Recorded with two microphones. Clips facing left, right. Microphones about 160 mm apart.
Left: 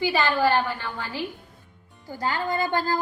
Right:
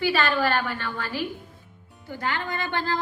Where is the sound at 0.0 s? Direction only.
15° left (ahead or behind).